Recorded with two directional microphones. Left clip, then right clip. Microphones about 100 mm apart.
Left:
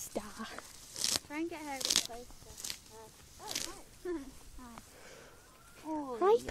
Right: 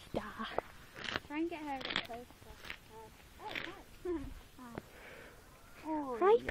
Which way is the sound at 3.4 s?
90° left.